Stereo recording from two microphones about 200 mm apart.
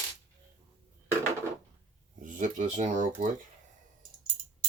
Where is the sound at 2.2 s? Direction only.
40° right (ahead or behind).